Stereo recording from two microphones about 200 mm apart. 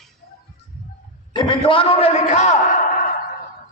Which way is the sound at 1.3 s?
25° left (ahead or behind).